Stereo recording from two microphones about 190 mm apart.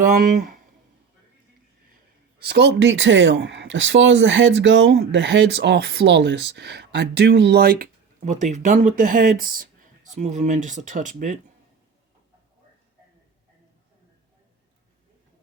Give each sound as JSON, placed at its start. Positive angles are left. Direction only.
{"t": 0.0, "sound": "speech", "side_deg": -45}
{"t": 2.4, "sound": "speech", "side_deg": -60}